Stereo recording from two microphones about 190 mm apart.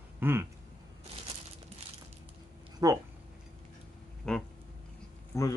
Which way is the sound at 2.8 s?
20° right (ahead or behind).